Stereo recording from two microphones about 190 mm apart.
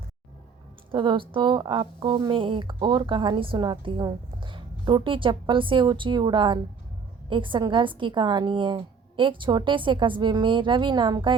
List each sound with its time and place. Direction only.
0.9 s speech: 25° right (ahead or behind)